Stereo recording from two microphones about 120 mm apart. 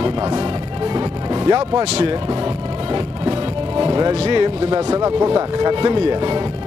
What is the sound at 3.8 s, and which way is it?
Music, 35° right (ahead or behind).